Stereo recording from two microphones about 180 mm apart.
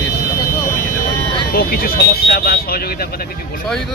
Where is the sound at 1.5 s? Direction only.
55° left (ahead or behind).